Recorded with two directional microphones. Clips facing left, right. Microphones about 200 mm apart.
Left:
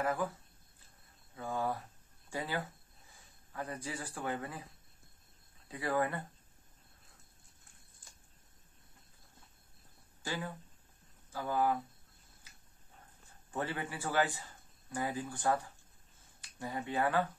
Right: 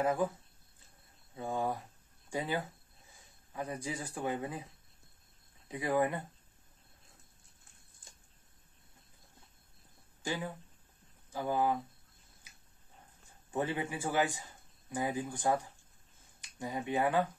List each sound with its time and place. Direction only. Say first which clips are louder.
0.0 s speech: right 3 dB; 20° right (ahead or behind)
1.3 s speech: right 1 dB; 20° right (ahead or behind)
5.7 s speech: right 3 dB; 15° right (ahead or behind)
10.2 s speech: right 2 dB; 15° right (ahead or behind)
13.5 s a man's voice: right 4 dB; 15° right (ahead or behind)